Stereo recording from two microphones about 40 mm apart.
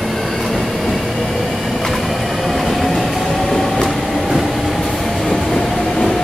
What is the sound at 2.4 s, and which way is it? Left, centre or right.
Train, centre.